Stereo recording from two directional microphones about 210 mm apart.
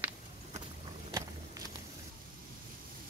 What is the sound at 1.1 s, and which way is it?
Vehicle, 15° right (ahead or behind).